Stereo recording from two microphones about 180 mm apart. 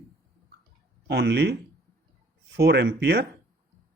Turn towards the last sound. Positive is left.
turn(degrees=-65)  # may be behind; listen again after turning